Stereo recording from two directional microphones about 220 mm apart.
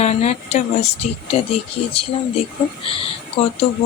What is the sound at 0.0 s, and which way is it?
Speech, 30° left (ahead or behind).